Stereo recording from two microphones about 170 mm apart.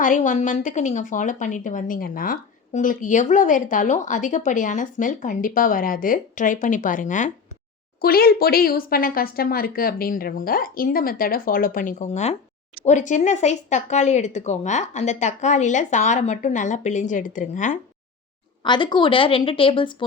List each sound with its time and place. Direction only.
0.0 s a woman's voice: 50° left (ahead or behind)
8.0 s a woman's voice: 65° left (ahead or behind)
18.6 s a woman's voice: 25° left (ahead or behind)